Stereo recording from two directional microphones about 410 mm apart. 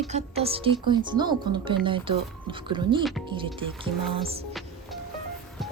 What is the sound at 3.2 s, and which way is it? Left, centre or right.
Speech, centre.